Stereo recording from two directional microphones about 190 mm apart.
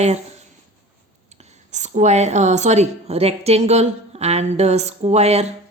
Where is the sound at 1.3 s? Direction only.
35° right (ahead or behind).